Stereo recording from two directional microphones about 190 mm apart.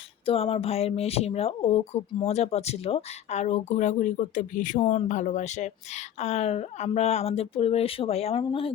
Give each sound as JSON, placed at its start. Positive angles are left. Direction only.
{"t": 0.3, "sound": "speech", "side_deg": 30}